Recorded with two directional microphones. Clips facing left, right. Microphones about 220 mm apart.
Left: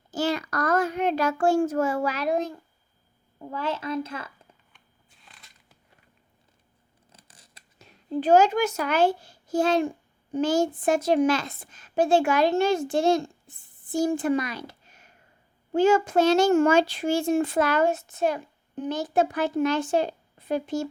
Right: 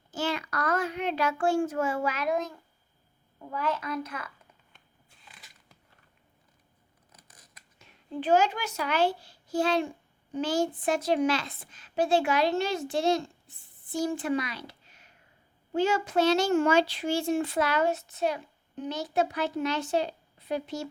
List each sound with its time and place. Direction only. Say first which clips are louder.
0.1 s a child's voice: left 5 dB; 40° left (ahead or behind)
7.1 s scissors: left 2 dB; 30° left (ahead or behind); by 9.9 s 45° left (ahead or behind)
10.3 s a child's voice: left 5 dB; 45° left (ahead or behind)